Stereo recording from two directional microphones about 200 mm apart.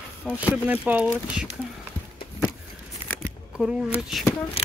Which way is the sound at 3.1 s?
Centre (ahead or behind).